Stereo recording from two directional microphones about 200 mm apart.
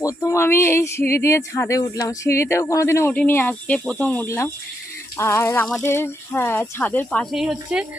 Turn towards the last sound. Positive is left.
turn(degrees=-5)  # may be behind; listen again after turning